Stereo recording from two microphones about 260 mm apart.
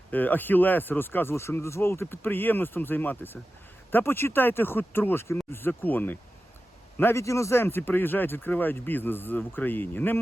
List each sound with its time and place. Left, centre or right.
0.1 s speech: centre